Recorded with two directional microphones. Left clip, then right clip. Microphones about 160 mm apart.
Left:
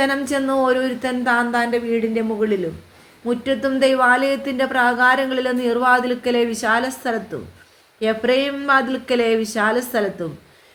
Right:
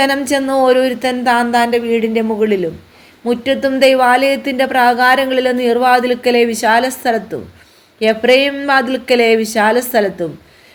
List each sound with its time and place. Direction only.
0.0 s speech: 40° right (ahead or behind)